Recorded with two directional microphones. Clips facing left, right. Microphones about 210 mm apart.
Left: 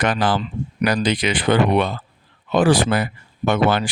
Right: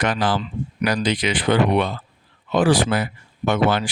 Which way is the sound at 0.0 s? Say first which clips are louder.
Left 2 dB; 55° left (ahead or behind).